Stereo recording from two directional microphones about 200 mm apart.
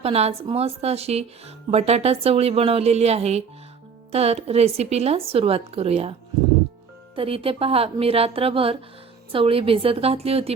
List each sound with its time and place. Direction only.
0.0 s speech: 30° right (ahead or behind)
7.2 s speech: 30° right (ahead or behind)